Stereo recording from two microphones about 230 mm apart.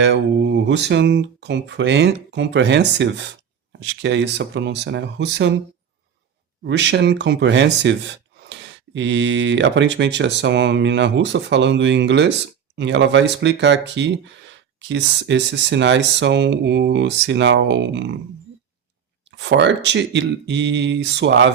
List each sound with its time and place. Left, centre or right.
0.0 s speech: right
6.7 s speech: right
19.4 s speech: right